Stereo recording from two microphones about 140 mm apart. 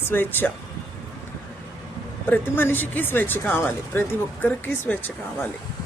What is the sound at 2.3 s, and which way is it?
Speech, 15° left (ahead or behind).